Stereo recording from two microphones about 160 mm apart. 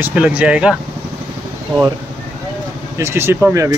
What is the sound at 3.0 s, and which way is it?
Speech, 15° right (ahead or behind).